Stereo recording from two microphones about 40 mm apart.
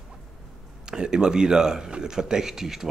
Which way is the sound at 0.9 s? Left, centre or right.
Centre.